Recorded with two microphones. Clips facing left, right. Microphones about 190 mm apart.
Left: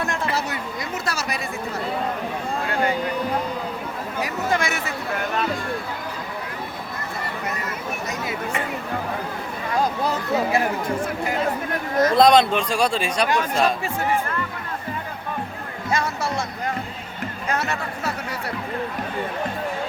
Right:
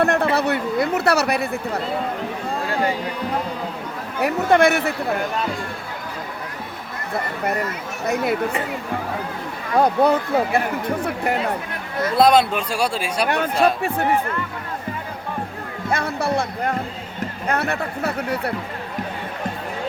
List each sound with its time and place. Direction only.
0.0 s speech: 60° right (ahead or behind)
4.2 s speech: 60° right (ahead or behind)
8.0 s speech: 60° right (ahead or behind)
9.7 s speech: 60° right (ahead or behind)
12.1 s speech: 5° right (ahead or behind)
13.2 s speech: 60° right (ahead or behind)
15.9 s speech: 60° right (ahead or behind)